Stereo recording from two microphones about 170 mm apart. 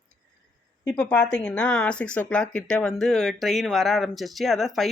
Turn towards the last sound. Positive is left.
turn(degrees=0)  # may be behind; listen again after turning